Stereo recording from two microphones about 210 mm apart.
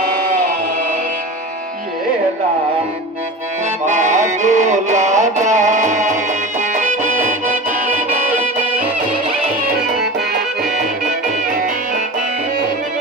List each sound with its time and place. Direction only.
3.8 s music: 35° right (ahead or behind)